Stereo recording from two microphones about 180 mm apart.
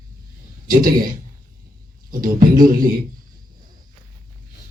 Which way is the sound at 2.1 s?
50° right (ahead or behind).